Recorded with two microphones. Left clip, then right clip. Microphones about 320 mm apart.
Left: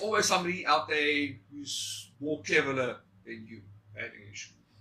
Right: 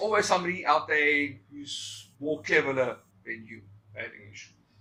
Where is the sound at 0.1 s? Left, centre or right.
Right.